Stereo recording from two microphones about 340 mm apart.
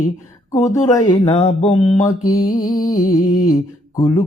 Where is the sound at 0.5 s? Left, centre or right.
Centre.